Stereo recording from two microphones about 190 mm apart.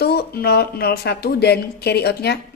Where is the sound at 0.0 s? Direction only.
55° left (ahead or behind).